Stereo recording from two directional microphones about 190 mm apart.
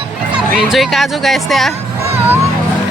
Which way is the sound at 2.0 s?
10° right (ahead or behind).